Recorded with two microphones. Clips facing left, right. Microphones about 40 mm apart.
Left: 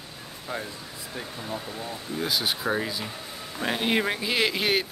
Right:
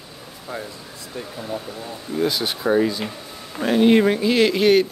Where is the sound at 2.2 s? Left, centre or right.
Centre.